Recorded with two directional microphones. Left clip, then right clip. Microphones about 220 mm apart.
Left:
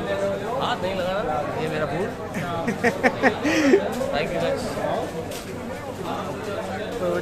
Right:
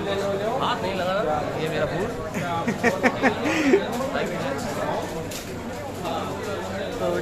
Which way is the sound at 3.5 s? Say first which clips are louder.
Left 2 dB; 10° left (ahead or behind).